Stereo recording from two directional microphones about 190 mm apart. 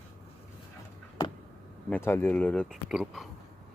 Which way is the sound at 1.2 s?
20° left (ahead or behind).